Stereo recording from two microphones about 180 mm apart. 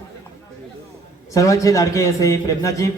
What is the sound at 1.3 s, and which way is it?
A man's voice, 20° left (ahead or behind).